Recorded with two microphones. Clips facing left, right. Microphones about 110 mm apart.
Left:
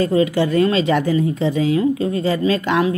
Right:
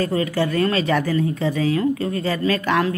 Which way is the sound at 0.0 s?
20° left (ahead or behind).